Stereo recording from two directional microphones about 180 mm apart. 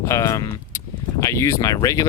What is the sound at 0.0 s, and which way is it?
Speech, 15° left (ahead or behind).